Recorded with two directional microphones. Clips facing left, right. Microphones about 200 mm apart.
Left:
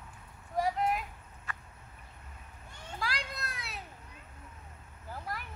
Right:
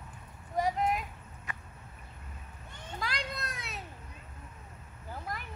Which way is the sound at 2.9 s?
5° left (ahead or behind).